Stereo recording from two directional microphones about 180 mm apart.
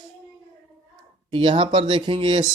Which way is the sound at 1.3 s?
30° right (ahead or behind).